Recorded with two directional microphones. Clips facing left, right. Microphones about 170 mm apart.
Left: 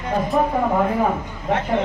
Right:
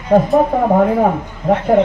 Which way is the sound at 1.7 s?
45° right (ahead or behind).